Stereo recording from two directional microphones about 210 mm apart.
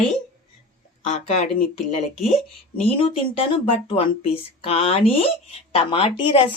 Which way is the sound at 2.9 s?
25° left (ahead or behind).